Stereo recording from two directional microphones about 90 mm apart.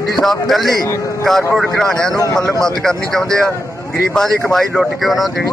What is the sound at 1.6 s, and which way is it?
A man's voice, 5° left (ahead or behind).